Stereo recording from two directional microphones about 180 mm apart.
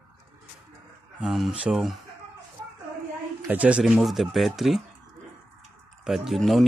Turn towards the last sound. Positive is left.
turn(degrees=0)  # may be behind; listen again after turning